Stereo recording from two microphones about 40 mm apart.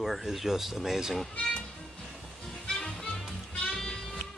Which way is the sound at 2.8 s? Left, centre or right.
Centre.